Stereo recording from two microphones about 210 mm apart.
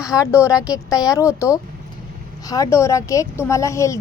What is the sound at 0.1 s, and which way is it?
A woman's voice, 15° left (ahead or behind).